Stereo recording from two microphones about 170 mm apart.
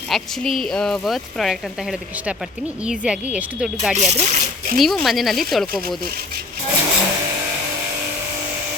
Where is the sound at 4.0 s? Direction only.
45° right (ahead or behind).